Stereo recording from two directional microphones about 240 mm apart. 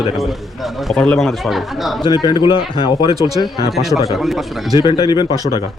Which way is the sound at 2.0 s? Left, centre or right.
Centre.